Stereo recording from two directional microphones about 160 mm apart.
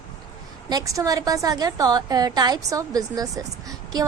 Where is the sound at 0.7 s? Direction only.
20° right (ahead or behind).